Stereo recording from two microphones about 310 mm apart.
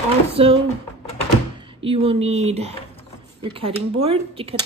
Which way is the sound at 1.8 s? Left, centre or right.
Centre.